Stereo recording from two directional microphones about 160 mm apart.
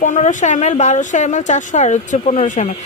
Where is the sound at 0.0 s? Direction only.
50° left (ahead or behind).